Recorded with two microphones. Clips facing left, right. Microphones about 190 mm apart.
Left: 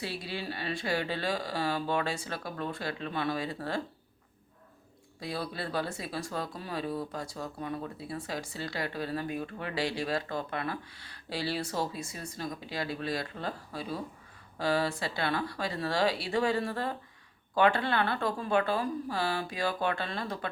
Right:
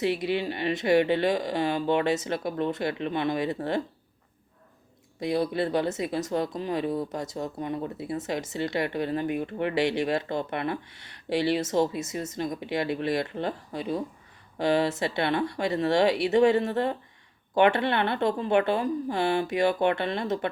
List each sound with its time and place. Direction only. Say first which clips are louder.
0.0 s speech: right 10 dB; 20° right (ahead or behind)
5.2 s speech: right 10 dB; 20° right (ahead or behind)